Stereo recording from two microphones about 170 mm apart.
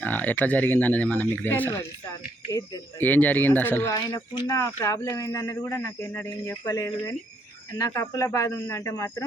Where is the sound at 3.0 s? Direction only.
10° left (ahead or behind).